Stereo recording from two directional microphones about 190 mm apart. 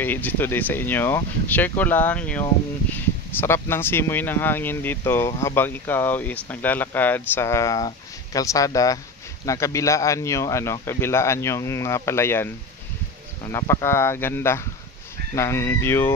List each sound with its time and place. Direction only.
0.0 s speech: 10° left (ahead or behind)